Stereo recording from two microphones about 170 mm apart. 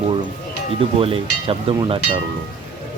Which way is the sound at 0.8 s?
35° right (ahead or behind).